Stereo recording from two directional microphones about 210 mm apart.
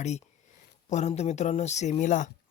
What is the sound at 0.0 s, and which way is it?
Speech, 30° left (ahead or behind).